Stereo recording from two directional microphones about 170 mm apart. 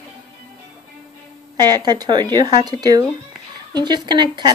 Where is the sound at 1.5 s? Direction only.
25° right (ahead or behind).